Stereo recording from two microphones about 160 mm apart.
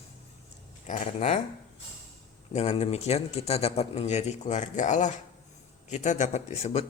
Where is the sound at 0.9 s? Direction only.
45° left (ahead or behind).